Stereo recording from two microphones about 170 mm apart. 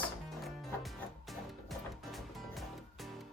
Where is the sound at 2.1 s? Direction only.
Centre (ahead or behind).